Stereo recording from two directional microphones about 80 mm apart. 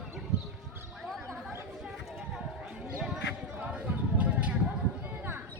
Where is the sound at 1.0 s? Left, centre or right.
Centre.